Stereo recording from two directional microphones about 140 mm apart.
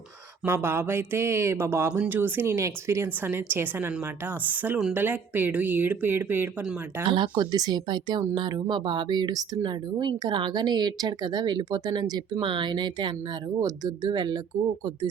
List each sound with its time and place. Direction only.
0.4 s a woman's voice: 20° right (ahead or behind)
7.1 s speech: 35° right (ahead or behind)